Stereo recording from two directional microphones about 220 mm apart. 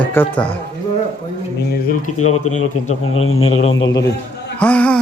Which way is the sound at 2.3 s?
85° left.